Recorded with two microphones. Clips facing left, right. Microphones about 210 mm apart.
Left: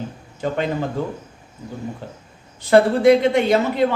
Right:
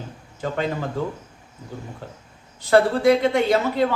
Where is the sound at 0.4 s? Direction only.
20° left (ahead or behind).